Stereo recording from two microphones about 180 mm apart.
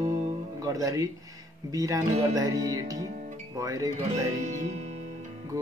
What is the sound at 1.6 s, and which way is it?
Music, 20° right (ahead or behind).